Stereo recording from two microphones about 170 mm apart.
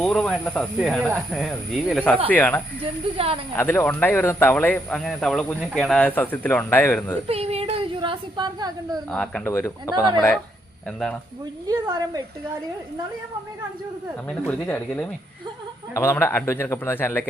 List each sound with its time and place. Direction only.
0.0 s speech: 5° left (ahead or behind)
2.8 s speech: 35° right (ahead or behind)
3.5 s speech: 10° left (ahead or behind)
7.3 s a sound: 35° right (ahead or behind)
9.0 s speech: 5° left (ahead or behind)
9.5 s speech: 15° left (ahead or behind)
10.8 s speech: 5° left (ahead or behind)
11.7 s a woman's voice: 20° right (ahead or behind)
14.3 s speech: 5° left (ahead or behind)